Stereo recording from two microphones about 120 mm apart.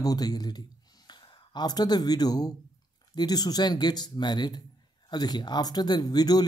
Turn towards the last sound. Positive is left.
turn(degrees=35)  # may be behind; listen again after turning